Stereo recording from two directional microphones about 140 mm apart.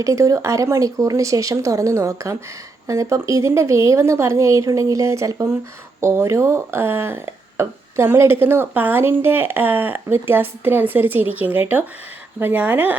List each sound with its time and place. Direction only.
0.0 s speech: 25° right (ahead or behind)